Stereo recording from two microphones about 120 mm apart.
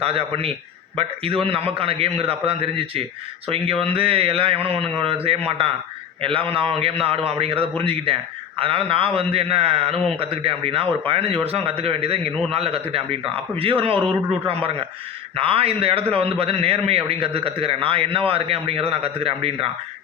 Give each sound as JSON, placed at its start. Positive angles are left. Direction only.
{"t": 0.0, "sound": "a man's voice", "side_deg": -55}